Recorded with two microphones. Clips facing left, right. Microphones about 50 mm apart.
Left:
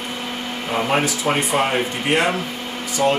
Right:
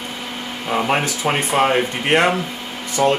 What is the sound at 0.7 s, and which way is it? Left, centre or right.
Speech, centre.